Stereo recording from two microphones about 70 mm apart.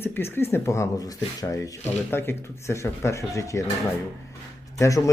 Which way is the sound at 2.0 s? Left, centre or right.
Left.